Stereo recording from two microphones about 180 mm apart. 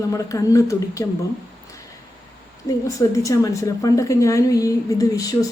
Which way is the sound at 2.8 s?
20° left (ahead or behind).